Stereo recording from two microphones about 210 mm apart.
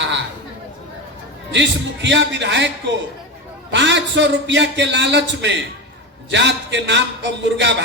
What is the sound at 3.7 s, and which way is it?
A man's voice, 60° right (ahead or behind).